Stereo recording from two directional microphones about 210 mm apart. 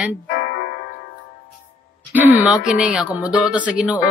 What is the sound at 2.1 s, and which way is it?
Speech, 10° right (ahead or behind).